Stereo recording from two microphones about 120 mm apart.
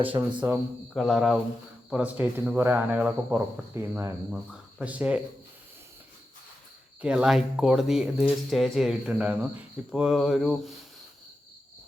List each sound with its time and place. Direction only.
0.0 s speech: 45° right (ahead or behind)
0.9 s speech: centre (ahead or behind)
3.8 s speech: 20° right (ahead or behind)
4.3 s speech: 10° right (ahead or behind)
7.0 s speech: 10° right (ahead or behind)